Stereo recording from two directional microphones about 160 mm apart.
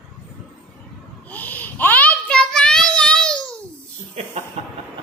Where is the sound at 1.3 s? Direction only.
10° left (ahead or behind).